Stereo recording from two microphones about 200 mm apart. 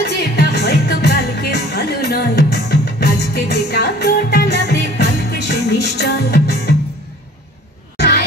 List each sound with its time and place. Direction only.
0.0 s music: 55° left (ahead or behind)